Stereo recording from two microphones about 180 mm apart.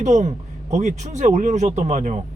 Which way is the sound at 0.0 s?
40° right (ahead or behind).